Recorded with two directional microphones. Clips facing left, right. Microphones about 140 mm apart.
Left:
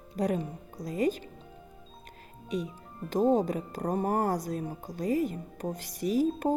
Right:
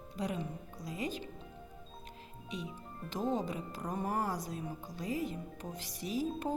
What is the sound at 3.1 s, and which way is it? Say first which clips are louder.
Speech: left 10 dB; 45° left (ahead or behind).